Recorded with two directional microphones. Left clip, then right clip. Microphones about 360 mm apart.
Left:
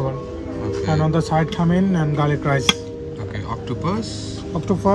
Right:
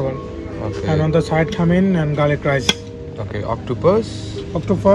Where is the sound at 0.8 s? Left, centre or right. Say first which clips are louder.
Right 5 dB; centre.